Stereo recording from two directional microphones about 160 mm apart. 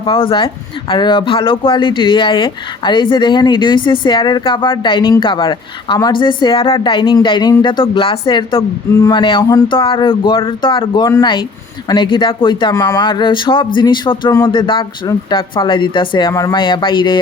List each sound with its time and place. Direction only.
0.0 s speech: 35° left (ahead or behind)